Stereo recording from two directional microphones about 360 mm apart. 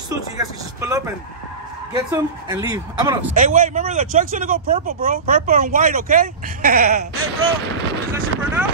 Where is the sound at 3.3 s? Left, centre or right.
Right.